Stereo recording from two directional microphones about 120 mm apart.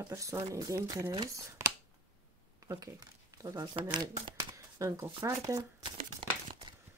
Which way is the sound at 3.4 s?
30° right (ahead or behind).